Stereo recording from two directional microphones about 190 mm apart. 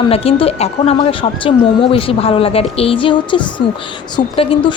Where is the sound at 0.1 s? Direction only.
30° left (ahead or behind).